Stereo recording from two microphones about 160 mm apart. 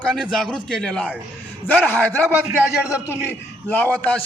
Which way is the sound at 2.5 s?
5° right (ahead or behind).